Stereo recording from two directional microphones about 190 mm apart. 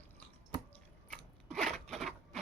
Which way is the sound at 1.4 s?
Centre (ahead or behind).